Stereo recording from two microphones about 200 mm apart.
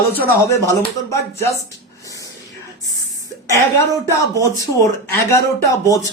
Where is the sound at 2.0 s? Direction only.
15° left (ahead or behind).